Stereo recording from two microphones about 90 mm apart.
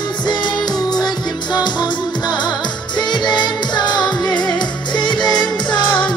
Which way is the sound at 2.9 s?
55° left (ahead or behind).